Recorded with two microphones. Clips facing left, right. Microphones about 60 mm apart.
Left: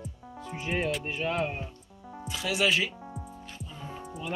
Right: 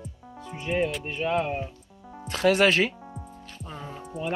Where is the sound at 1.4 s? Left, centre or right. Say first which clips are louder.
Right 3 dB; centre.